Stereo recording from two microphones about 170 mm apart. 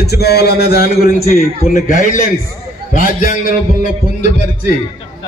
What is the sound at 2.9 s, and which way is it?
A man's voice, 50° left (ahead or behind).